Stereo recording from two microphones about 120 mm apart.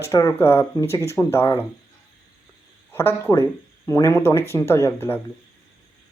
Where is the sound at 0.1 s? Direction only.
25° left (ahead or behind).